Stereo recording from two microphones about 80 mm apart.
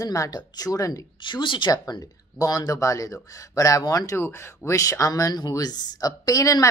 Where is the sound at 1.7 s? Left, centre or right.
Left.